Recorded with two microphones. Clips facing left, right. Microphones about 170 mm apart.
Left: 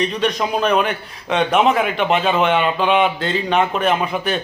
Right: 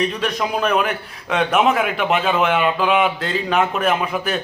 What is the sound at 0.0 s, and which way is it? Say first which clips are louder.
A man's voice: left 2 dB; 5° right (ahead or behind).